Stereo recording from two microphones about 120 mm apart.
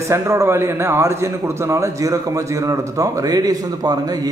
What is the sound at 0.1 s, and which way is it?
A man's voice, 25° right (ahead or behind).